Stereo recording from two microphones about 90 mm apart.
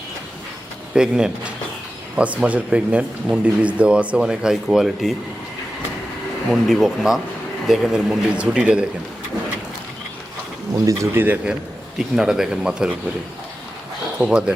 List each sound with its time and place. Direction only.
0.9 s speech: 10° right (ahead or behind)
6.5 s speech: centre (ahead or behind)
10.8 s speech: 30° right (ahead or behind)
11.9 s speech: 5° right (ahead or behind)
14.2 s speech: 10° right (ahead or behind)